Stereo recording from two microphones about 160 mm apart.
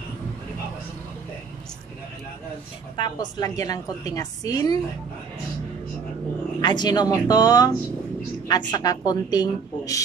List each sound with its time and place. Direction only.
3.0 s a woman's voice: 25° left (ahead or behind)
6.6 s a woman's voice: 25° left (ahead or behind)